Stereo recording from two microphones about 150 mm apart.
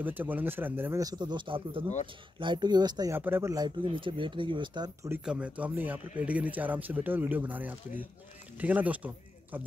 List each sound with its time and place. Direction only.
0.0 s speech: 10° right (ahead or behind)
3.2 s speech: 15° right (ahead or behind); by 4.9 s 30° right (ahead or behind)
5.2 s speech: 5° right (ahead or behind)